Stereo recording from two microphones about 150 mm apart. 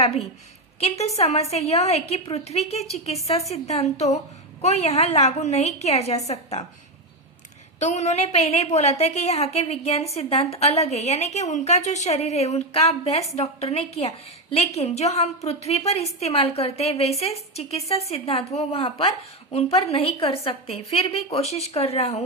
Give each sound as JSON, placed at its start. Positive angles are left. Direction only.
{"t": 0.8, "sound": "a woman's voice", "side_deg": 45}
{"t": 7.8, "sound": "a woman's voice", "side_deg": 50}